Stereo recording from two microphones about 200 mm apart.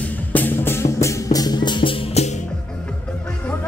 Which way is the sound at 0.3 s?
10° left (ahead or behind).